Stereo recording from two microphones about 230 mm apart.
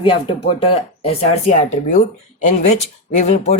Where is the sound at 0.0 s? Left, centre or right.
Left.